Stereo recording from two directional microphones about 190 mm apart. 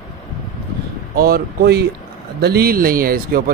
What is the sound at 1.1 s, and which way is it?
Speech, 55° right (ahead or behind).